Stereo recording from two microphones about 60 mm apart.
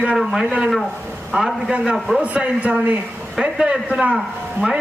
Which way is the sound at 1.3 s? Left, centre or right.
Centre.